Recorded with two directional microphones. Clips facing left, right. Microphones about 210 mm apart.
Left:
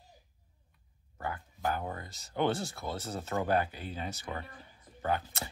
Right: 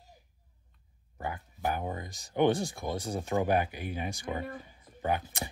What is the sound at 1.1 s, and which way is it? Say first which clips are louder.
Speech: right 1 dB; 15° right (ahead or behind).